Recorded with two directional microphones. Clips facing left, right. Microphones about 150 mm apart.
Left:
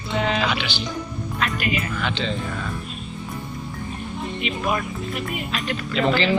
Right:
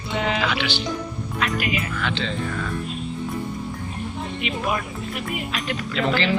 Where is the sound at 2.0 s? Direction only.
20° left (ahead or behind).